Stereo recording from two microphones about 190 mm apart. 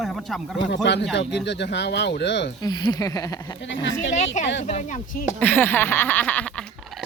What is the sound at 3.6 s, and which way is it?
Speech, 75° left (ahead or behind).